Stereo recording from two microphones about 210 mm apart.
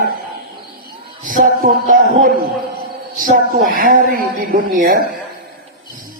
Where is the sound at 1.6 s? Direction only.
45° right (ahead or behind).